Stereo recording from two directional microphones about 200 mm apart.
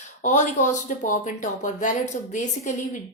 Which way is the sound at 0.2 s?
40° left (ahead or behind).